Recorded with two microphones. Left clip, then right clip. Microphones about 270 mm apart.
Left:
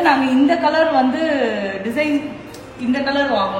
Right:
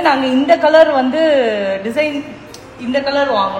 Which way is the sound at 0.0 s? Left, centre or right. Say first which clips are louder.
Right 1 dB; right.